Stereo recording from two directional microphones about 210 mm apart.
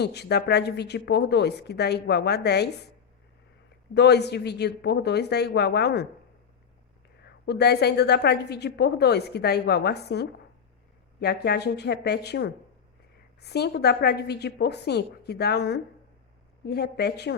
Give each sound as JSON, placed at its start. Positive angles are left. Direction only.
{"t": 0.0, "sound": "a woman's voice", "side_deg": 50}
{"t": 3.9, "sound": "a woman's voice", "side_deg": 50}
{"t": 7.3, "sound": "a woman's voice", "side_deg": 50}